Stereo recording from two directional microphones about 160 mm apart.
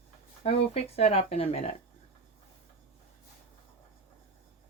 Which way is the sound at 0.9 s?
40° left (ahead or behind).